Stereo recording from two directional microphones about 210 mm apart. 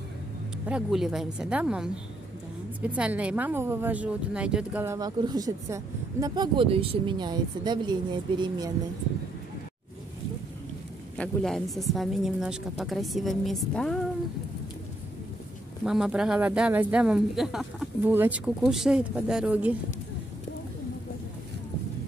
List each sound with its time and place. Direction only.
0.7 s speech: 5° right (ahead or behind); by 8.7 s 20° right (ahead or behind)
11.1 s speech: centre (ahead or behind)
15.8 s speech: 5° right (ahead or behind)